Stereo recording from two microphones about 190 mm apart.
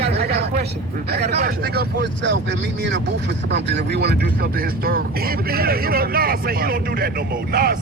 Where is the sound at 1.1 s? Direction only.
55° right (ahead or behind).